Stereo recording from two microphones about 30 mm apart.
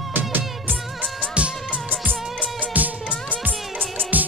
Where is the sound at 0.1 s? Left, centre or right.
Right.